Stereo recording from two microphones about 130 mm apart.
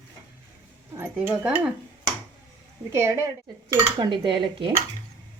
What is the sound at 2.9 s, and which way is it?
Speech, 20° right (ahead or behind).